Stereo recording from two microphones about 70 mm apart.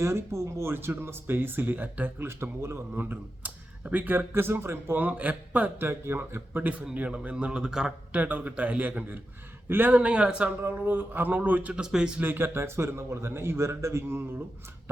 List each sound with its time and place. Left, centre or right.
0.0 s speech: right
2.2 s speech: right
4.9 s a man's voice: right
5.9 s a man's voice: right; by 7.9 s centre
8.1 s a man's voice: right
10.6 s a man's voice: right
11.8 s speech: centre
12.2 s speech: right